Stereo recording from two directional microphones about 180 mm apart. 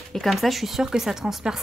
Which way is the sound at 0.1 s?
Centre (ahead or behind).